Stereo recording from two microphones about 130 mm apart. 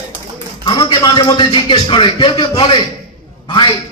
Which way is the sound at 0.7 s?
40° left (ahead or behind).